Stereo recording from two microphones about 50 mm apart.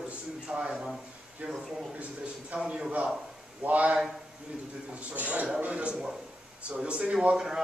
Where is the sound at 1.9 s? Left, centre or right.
Right.